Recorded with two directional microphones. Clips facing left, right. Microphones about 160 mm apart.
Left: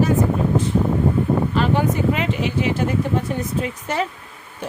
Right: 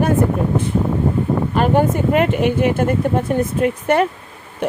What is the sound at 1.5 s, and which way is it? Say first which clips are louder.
Speech: right 4 dB; 50° right (ahead or behind).